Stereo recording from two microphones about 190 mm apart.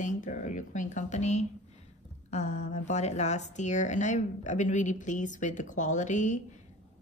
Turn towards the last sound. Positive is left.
turn(degrees=40)  # may be behind; listen again after turning